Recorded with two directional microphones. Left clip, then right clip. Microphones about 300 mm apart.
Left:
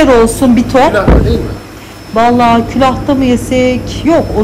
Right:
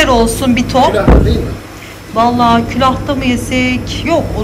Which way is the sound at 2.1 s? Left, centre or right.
Centre.